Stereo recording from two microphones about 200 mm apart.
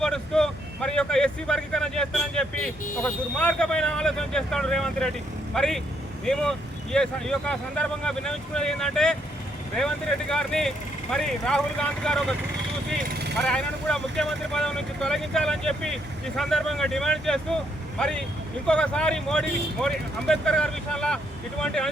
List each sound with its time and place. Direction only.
0.0 s speech: 5° left (ahead or behind)
13.0 s speech: 50° right (ahead or behind)
13.4 s speech: 5° left (ahead or behind)